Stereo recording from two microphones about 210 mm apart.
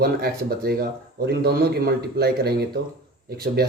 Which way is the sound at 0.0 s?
45° right (ahead or behind).